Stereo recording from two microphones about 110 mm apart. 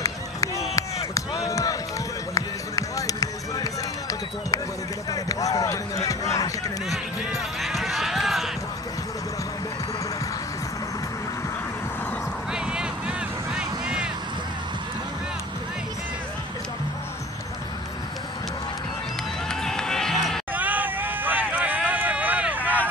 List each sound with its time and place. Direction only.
1.5 s run: 35° left (ahead or behind)
2.3 s music: 30° left (ahead or behind)
5.1 s basketball bounce: 35° left (ahead or behind)
7.6 s run: centre (ahead or behind)
12.5 s vehicle: 5° right (ahead or behind)
19.5 s run: 5° left (ahead or behind)
20.5 s a sound: 15° right (ahead or behind)